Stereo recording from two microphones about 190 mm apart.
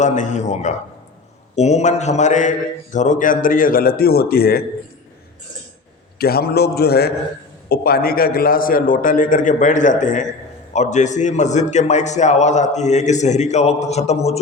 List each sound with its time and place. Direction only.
0.0 s a man's voice: 40° left (ahead or behind)
6.1 s a man's voice: 55° left (ahead or behind); by 14.3 s 35° left (ahead or behind)